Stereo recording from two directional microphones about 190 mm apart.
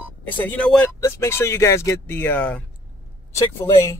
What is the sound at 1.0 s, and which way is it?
Speech, 15° left (ahead or behind).